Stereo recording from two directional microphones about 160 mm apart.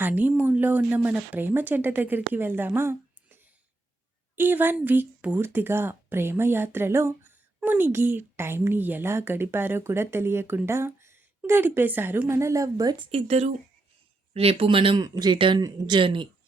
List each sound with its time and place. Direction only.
0.0 s a woman's voice: 10° right (ahead or behind)
13.1 s speech: 40° right (ahead or behind)